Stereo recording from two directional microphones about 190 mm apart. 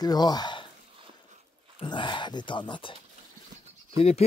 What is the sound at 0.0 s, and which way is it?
Speech, 20° left (ahead or behind).